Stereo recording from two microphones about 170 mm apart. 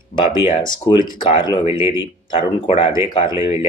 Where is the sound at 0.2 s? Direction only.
25° left (ahead or behind).